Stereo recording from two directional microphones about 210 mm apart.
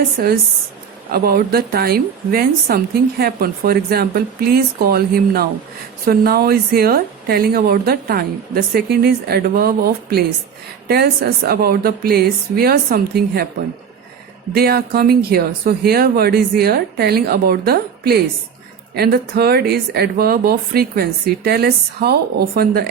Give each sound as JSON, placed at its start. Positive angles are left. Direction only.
{"t": 0.2, "sound": "a woman's voice", "side_deg": -45}
{"t": 14.5, "sound": "a woman's voice", "side_deg": -45}